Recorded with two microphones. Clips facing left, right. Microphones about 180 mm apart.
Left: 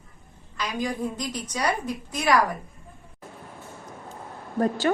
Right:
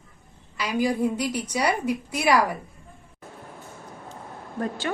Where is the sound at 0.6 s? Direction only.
10° right (ahead or behind).